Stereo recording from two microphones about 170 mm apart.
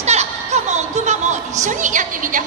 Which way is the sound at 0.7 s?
40° right (ahead or behind).